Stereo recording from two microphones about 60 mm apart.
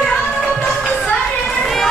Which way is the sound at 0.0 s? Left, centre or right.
Centre.